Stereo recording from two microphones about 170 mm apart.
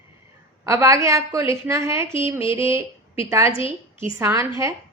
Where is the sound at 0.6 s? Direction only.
15° right (ahead or behind).